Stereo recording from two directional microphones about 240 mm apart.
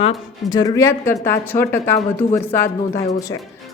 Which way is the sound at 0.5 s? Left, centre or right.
Centre.